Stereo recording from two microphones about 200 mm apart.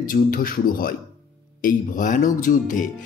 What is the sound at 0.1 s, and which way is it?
Speech, 45° left (ahead or behind).